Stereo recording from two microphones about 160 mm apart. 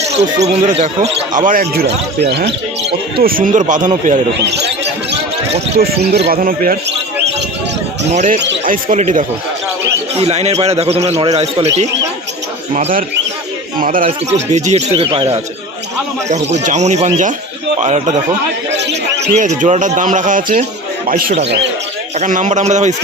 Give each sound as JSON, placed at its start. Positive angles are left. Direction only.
{"t": 0.4, "sound": "speech", "side_deg": -40}
{"t": 1.4, "sound": "speech", "side_deg": -60}
{"t": 3.2, "sound": "speech", "side_deg": -65}
{"t": 4.4, "sound": "speech", "side_deg": -90}
{"t": 5.7, "sound": "speech", "side_deg": -80}
{"t": 8.1, "sound": "speech", "side_deg": -50}
{"t": 8.4, "sound": "speech", "side_deg": -75}
{"t": 10.2, "sound": "a man's voice", "side_deg": -40}
{"t": 12.7, "sound": "speech", "side_deg": -55}
{"t": 14.3, "sound": "speech", "side_deg": -45}
{"t": 16.5, "sound": "speech", "side_deg": -45}
{"t": 18.7, "sound": "a sound", "side_deg": -90}
{"t": 19.4, "sound": "speech", "side_deg": -45}